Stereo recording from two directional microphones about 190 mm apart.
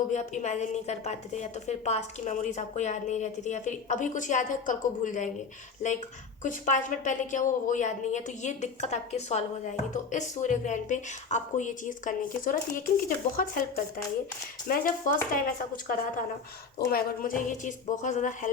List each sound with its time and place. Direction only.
0.1 s a woman's voice: 40° left (ahead or behind)